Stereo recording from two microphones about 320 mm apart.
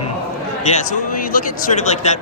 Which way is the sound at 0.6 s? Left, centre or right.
Left.